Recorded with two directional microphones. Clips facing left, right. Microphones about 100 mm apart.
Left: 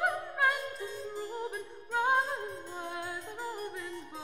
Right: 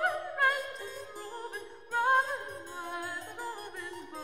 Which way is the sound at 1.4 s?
Centre (ahead or behind).